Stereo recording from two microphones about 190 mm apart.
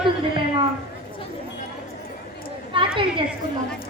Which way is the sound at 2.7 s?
25° right (ahead or behind).